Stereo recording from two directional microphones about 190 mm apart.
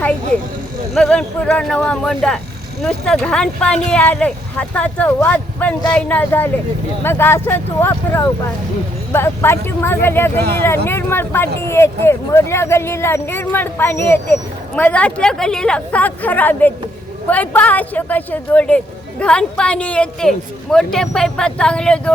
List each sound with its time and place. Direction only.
0.9 s speech: 5° left (ahead or behind)